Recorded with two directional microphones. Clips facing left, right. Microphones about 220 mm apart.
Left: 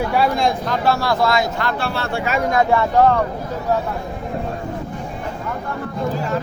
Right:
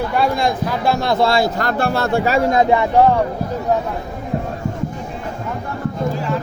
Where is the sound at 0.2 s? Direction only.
Centre (ahead or behind); by 3.2 s 20° right (ahead or behind).